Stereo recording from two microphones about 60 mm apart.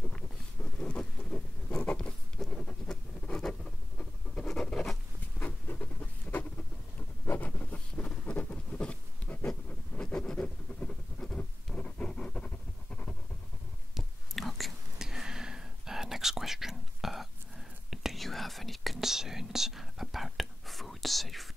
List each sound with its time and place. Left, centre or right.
0.7 s patter: centre
4.5 s writing: centre
5.4 s a sound: left
9.5 s a sound: centre
13.9 s chewing: centre
15.0 s whispering: centre